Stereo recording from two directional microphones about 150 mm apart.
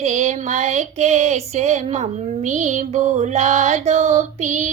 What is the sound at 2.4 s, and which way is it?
Mantra, 55° right (ahead or behind).